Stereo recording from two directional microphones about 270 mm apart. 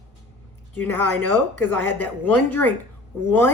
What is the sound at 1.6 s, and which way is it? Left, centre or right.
Speech, centre.